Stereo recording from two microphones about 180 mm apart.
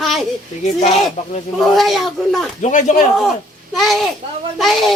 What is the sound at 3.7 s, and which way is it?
A child's voice, centre (ahead or behind).